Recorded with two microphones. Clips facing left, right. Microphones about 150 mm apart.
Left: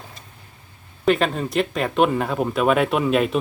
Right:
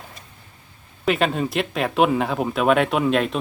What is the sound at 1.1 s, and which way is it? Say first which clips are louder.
Speech: left 1 dB; centre (ahead or behind).